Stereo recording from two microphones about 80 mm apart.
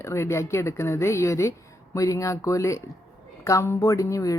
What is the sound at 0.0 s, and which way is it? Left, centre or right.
Speech, left.